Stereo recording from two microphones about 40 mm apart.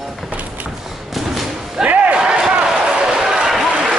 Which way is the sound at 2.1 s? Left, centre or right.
Right.